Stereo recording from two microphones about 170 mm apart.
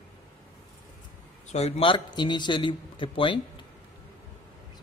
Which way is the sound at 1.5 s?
40° left (ahead or behind).